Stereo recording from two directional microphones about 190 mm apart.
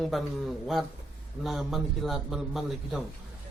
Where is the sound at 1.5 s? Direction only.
Centre (ahead or behind).